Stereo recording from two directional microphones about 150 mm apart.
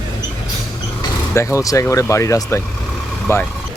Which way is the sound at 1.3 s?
20° left (ahead or behind).